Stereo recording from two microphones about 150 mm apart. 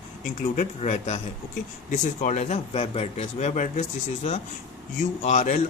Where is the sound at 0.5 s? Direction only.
45° left (ahead or behind).